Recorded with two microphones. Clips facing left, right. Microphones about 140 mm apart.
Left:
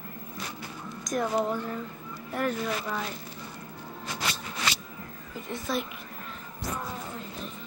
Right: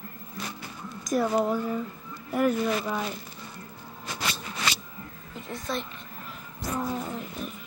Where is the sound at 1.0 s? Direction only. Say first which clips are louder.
Right 3 dB; 5° right (ahead or behind).